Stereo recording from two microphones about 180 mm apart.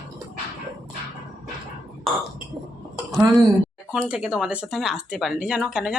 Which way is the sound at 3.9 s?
5° right (ahead or behind).